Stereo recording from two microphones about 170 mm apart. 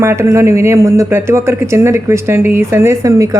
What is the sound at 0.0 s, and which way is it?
Speech, 15° right (ahead or behind).